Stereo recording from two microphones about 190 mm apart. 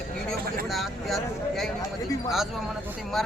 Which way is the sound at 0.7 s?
Centre (ahead or behind).